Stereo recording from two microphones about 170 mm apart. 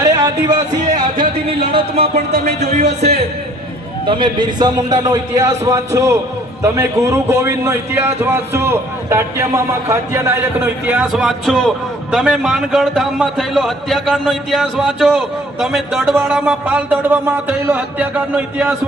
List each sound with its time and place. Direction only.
0.0 s a sound: 20° right (ahead or behind)
1.7 s speech: 35° right (ahead or behind)
4.0 s a man's voice: 30° right (ahead or behind); by 18.7 s 10° right (ahead or behind)